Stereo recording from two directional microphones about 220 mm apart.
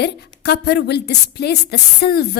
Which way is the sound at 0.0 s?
50° left (ahead or behind).